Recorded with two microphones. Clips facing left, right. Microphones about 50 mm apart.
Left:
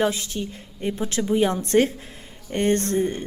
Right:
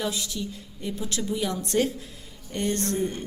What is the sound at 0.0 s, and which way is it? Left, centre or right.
A woman's voice, left.